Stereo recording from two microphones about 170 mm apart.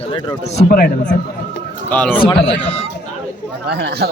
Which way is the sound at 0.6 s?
60° left (ahead or behind).